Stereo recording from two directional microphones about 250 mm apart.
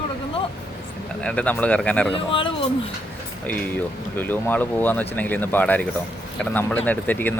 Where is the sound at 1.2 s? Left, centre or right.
Centre.